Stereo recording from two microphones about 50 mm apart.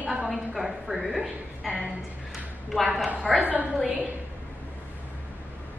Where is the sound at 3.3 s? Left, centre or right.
Right.